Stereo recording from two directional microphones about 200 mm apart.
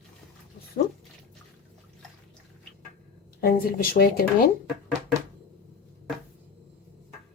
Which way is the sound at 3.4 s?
50° left (ahead or behind).